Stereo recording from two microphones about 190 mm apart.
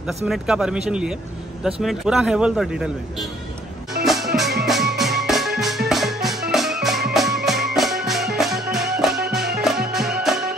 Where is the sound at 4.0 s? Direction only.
Centre (ahead or behind).